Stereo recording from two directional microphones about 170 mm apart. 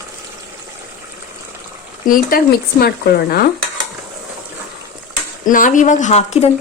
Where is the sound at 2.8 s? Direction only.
65° left (ahead or behind).